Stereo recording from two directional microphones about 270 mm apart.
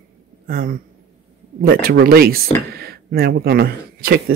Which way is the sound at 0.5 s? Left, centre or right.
Right.